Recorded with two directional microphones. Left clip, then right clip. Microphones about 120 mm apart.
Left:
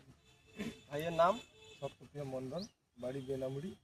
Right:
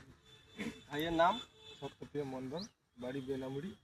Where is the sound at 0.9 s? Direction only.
50° left (ahead or behind).